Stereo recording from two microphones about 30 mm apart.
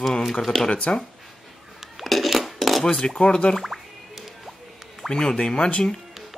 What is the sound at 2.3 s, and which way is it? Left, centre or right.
Cutlery, centre.